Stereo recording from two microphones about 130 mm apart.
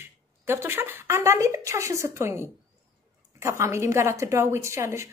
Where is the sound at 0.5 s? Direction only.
20° right (ahead or behind).